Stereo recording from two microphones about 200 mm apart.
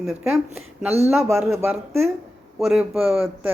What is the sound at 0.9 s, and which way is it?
Speech, 30° right (ahead or behind).